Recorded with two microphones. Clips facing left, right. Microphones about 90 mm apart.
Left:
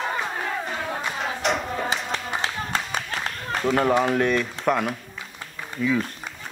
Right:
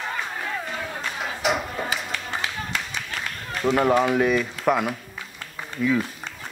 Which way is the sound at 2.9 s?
45° left (ahead or behind).